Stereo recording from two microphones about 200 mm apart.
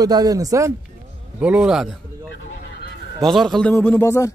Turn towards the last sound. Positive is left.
turn(degrees=15)  # may be behind; listen again after turning